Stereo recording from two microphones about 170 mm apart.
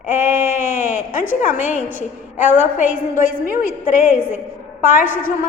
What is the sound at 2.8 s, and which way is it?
A woman's voice, 50° left (ahead or behind).